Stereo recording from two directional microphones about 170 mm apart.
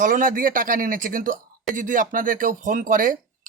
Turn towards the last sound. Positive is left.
turn(degrees=-55)  # may be behind; listen again after turning